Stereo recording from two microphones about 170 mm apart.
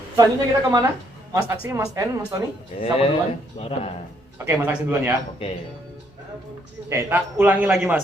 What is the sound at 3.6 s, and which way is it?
Speech, 40° left (ahead or behind).